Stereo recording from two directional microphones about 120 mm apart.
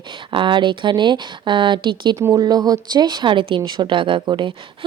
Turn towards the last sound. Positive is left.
turn(degrees=-40)  # may be behind; listen again after turning